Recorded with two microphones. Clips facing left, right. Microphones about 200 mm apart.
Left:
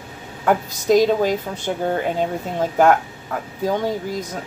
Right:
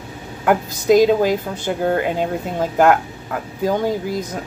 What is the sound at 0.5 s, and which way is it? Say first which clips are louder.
Speech: right 2 dB; 5° right (ahead or behind).